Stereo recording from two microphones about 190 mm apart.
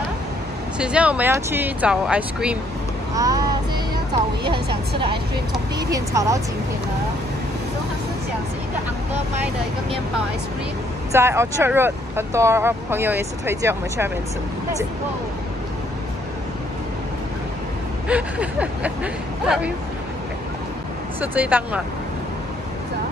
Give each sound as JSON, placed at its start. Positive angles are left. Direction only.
{"t": 0.7, "sound": "speech", "side_deg": -5}
{"t": 4.5, "sound": "a woman's voice", "side_deg": -25}
{"t": 11.1, "sound": "speech", "side_deg": -15}
{"t": 18.0, "sound": "speech", "side_deg": -5}
{"t": 21.2, "sound": "speech", "side_deg": -10}